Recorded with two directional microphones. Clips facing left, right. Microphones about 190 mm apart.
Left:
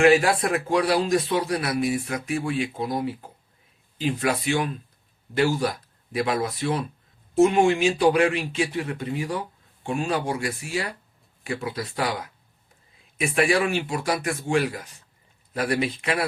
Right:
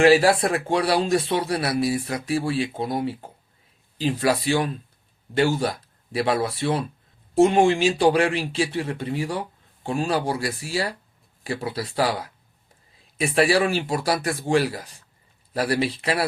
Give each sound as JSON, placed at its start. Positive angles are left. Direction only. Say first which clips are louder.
{"t": 0.0, "sound": "a man's voice", "louder": "right 2 dB", "side_deg": -35}
{"t": 3.9, "sound": "a man's voice", "louder": "right 3 dB", "side_deg": -35}